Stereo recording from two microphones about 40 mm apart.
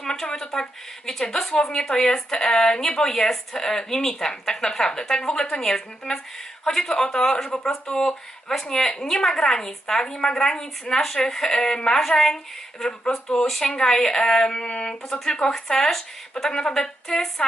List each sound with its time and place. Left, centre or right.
0.0 s a woman's voice: centre
13.4 s a woman's voice: centre